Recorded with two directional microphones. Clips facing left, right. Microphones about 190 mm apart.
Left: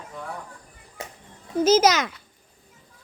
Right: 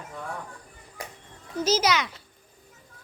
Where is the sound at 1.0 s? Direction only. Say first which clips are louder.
Left 2 dB; 25° left (ahead or behind).